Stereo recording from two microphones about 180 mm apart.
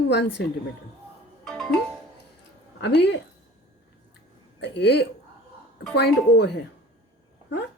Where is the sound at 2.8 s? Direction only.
70° left (ahead or behind).